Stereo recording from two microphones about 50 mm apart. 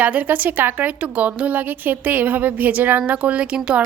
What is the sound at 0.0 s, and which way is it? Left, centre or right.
Speech, right.